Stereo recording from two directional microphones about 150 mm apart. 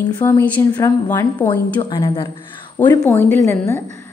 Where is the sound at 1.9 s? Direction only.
30° left (ahead or behind).